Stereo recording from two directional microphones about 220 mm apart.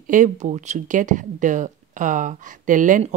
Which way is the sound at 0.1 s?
35° right (ahead or behind).